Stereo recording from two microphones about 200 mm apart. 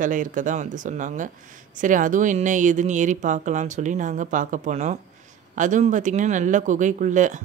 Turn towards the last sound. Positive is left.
turn(degrees=-40)  # may be behind; listen again after turning